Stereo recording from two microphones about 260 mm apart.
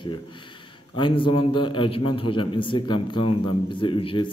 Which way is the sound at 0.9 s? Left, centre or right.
Centre.